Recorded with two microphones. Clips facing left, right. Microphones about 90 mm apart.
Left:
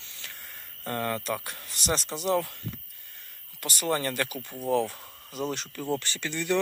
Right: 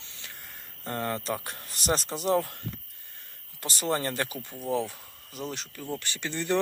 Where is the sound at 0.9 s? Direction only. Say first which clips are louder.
Left 1 dB; 20° right (ahead or behind); by 2.6 s 40° right (ahead or behind).